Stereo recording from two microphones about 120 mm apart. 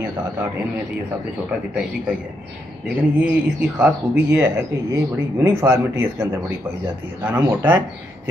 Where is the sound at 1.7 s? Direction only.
5° right (ahead or behind).